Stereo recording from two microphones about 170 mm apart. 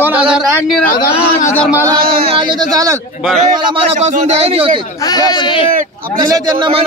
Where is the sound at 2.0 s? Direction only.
30° right (ahead or behind).